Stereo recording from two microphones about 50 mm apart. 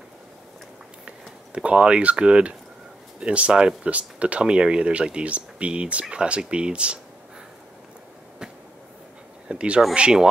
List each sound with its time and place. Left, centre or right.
1.0 s speech: right
9.5 s a sound: right
9.9 s speech: centre